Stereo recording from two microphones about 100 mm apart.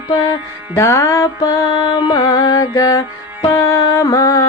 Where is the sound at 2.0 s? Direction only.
45° left (ahead or behind).